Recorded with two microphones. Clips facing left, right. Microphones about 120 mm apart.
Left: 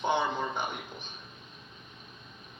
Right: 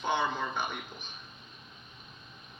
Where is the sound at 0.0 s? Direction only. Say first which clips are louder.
Left 2 dB; 20° left (ahead or behind).